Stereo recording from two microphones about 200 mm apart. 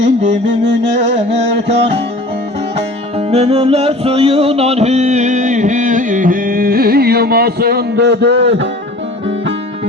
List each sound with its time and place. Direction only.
0.3 s music: 60° right (ahead or behind)
3.2 s music: 30° right (ahead or behind); by 8.6 s 65° right (ahead or behind)